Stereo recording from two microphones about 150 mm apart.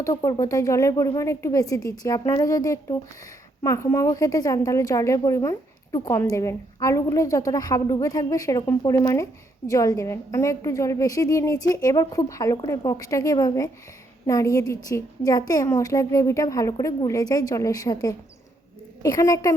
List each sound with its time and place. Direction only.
0.0 s a woman's voice: 20° left (ahead or behind)